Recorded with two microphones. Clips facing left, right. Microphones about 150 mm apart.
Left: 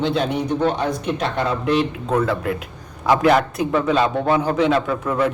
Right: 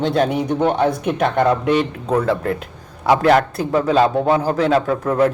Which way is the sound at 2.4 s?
10° left (ahead or behind).